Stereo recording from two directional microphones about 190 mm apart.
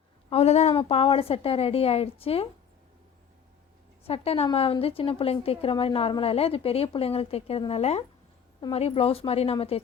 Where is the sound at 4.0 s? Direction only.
30° left (ahead or behind).